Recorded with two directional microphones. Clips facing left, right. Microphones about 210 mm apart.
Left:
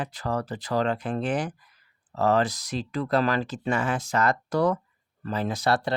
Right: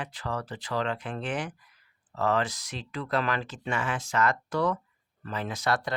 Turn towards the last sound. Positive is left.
turn(degrees=30)  # may be behind; listen again after turning